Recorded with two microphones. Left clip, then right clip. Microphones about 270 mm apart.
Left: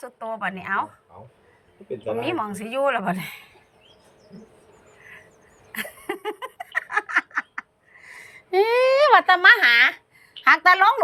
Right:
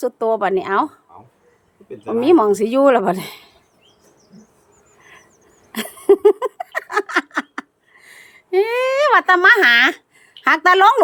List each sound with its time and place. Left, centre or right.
0.0 s speech: right
2.0 s speech: right
5.7 s a sound: right
10.4 s speech: centre